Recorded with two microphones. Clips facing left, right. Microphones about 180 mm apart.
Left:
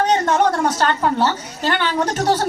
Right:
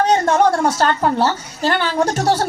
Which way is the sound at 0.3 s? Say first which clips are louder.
Right 2 dB; 30° right (ahead or behind).